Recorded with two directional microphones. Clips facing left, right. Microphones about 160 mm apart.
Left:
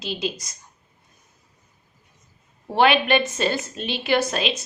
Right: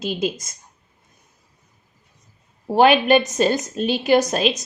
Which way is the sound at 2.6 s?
40° right (ahead or behind).